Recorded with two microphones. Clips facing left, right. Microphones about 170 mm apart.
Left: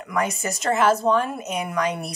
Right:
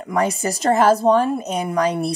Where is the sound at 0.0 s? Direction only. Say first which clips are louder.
Right 5 dB; 35° right (ahead or behind).